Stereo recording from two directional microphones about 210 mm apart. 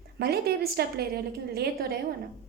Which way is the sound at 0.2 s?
50° right (ahead or behind).